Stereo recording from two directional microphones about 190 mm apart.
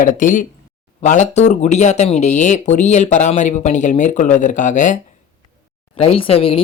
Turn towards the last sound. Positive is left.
turn(degrees=30)  # may be behind; listen again after turning